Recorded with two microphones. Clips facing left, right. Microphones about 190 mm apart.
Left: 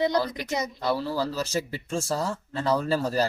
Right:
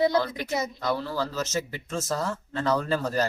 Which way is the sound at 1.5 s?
30° left (ahead or behind).